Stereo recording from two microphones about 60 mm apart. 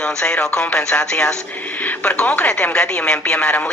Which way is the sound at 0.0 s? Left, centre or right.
Centre.